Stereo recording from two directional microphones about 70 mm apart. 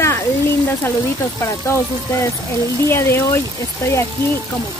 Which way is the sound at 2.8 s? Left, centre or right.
Left.